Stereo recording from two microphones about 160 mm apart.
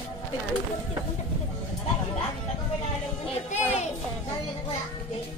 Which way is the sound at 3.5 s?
45° left (ahead or behind).